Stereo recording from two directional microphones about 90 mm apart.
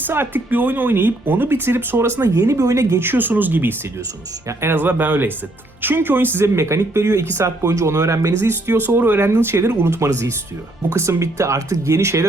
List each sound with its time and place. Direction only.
0.1 s speech: 25° right (ahead or behind)
3.0 s speech: 20° right (ahead or behind)